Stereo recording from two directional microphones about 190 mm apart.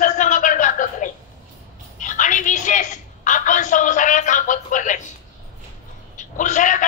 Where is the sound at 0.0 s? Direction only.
40° left (ahead or behind).